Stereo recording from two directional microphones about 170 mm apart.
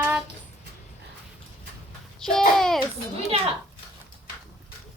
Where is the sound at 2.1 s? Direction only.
5° left (ahead or behind).